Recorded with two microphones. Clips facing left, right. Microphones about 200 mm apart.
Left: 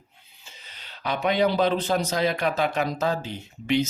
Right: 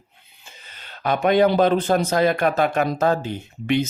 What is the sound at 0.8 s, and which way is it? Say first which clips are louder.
Speech: right 6 dB; 50° right (ahead or behind).